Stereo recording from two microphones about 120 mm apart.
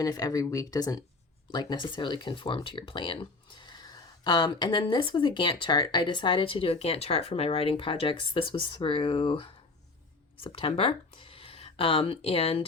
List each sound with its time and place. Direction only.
0.0 s speech: 30° left (ahead or behind)
1.5 s speech: 40° left (ahead or behind)